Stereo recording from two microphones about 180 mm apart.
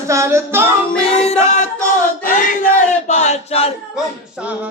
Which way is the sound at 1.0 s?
35° left (ahead or behind).